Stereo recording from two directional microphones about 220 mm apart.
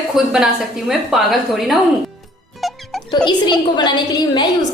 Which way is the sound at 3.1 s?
20° left (ahead or behind).